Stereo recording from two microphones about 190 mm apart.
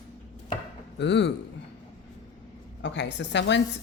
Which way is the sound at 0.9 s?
65° left (ahead or behind).